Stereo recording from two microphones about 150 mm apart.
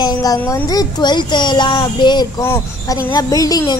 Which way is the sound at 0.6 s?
30° left (ahead or behind).